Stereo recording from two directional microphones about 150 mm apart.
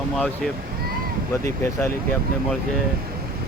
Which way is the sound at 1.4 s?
20° left (ahead or behind).